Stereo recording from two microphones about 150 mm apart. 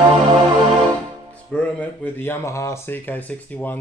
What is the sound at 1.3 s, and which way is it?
Speech, 10° left (ahead or behind).